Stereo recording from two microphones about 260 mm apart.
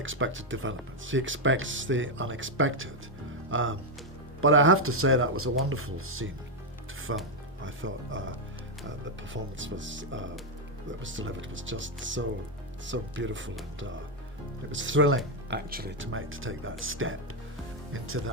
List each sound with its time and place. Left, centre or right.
0.0 s speech: right
14.7 s speech: right